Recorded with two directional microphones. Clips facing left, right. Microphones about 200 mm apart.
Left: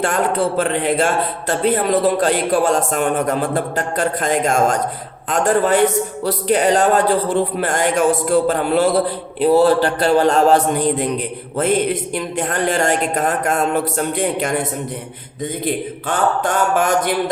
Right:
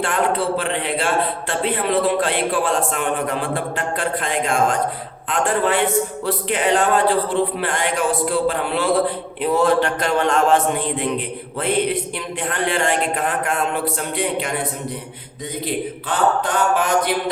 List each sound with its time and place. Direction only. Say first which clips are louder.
0.0 s a man's voice: left 2 dB; 45° left (ahead or behind)
15.6 s a man's voice: left 1 dB; 45° left (ahead or behind)